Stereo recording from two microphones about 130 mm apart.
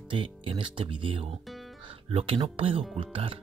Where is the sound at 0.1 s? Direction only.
40° right (ahead or behind).